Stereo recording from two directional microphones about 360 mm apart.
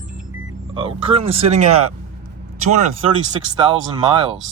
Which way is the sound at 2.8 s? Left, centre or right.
Centre.